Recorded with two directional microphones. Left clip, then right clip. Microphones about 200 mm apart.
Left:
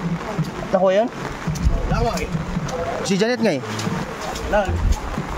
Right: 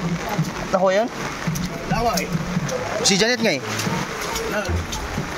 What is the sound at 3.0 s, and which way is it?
Speech, 20° left (ahead or behind).